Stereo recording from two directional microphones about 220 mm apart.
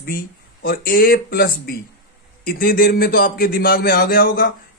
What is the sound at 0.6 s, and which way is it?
A man's voice, 40° left (ahead or behind).